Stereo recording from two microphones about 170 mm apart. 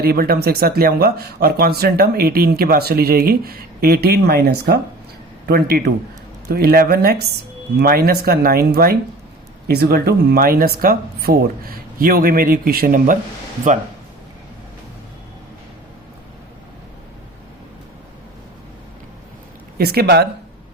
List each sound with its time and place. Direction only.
0.0 s speech: 65° right (ahead or behind)
19.8 s speech: 65° right (ahead or behind)